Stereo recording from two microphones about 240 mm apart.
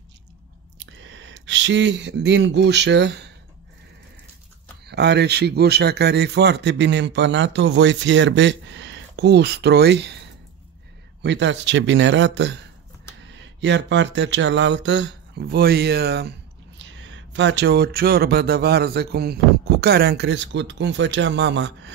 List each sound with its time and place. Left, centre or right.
0.7 s speech: right
4.8 s a man's voice: right
11.2 s a man's voice: right